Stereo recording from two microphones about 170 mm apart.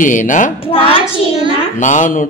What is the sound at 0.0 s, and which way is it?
Speech, 50° left (ahead or behind).